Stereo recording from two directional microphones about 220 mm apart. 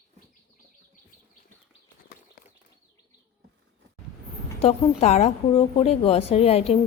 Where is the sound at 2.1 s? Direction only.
45° left (ahead or behind).